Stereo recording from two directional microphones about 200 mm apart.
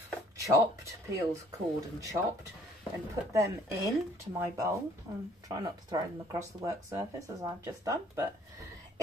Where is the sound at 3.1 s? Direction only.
15° right (ahead or behind).